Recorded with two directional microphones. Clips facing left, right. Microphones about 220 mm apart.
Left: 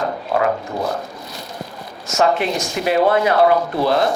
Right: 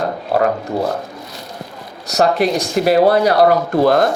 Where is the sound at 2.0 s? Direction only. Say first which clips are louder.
Right 3 dB; 35° right (ahead or behind).